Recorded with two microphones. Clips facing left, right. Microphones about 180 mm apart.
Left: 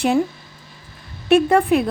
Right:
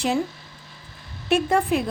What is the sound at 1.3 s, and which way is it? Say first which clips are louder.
Speech: left 6 dB; 60° left (ahead or behind).